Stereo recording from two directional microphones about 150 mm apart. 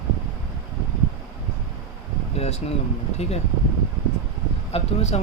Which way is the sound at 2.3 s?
45° left (ahead or behind).